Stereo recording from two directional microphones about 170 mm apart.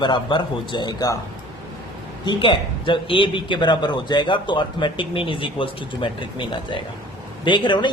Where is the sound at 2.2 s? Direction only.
30° left (ahead or behind).